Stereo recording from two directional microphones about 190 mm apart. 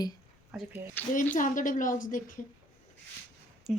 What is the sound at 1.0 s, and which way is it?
Speech, 10° left (ahead or behind).